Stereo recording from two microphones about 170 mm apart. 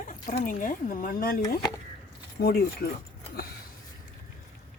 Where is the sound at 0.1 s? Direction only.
45° left (ahead or behind).